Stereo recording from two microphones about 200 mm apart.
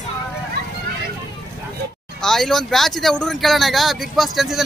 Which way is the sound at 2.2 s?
Centre (ahead or behind).